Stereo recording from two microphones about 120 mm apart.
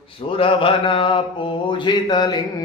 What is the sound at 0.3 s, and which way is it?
Mantra, 45° left (ahead or behind).